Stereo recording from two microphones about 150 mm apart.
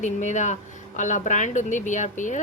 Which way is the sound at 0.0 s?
55° left (ahead or behind).